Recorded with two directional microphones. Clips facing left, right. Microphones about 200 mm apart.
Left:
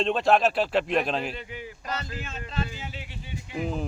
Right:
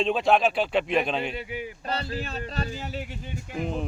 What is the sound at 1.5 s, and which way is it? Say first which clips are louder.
Speech: right 5 dB; 15° right (ahead or behind).